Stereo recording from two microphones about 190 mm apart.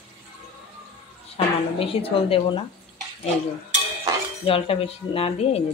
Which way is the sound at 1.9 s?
30° left (ahead or behind).